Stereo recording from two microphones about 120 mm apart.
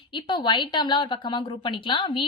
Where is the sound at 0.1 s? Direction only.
40° left (ahead or behind).